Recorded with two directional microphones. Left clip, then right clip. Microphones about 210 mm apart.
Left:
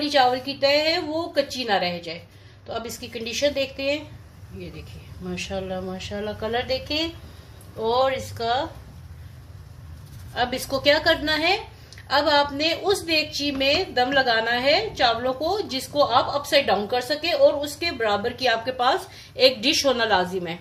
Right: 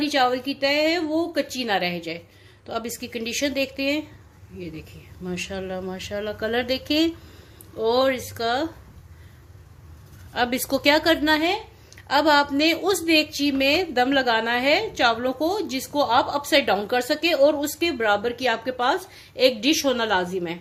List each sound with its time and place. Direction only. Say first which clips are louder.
0.0 s a woman's voice: left 2 dB; 30° right (ahead or behind)
5.2 s a woman's voice: even; 35° right (ahead or behind)
10.3 s a woman's voice: right 1 dB; 40° right (ahead or behind)